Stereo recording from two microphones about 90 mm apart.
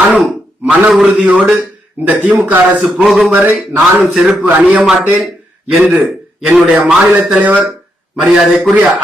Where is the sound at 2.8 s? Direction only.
5° right (ahead or behind).